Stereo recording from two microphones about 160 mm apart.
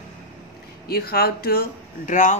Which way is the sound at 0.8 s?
75° left (ahead or behind).